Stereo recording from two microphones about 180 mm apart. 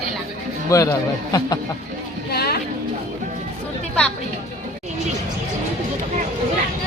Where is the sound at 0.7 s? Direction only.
20° left (ahead or behind).